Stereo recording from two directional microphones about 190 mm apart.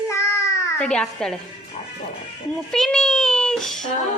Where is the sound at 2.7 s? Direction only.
5° left (ahead or behind).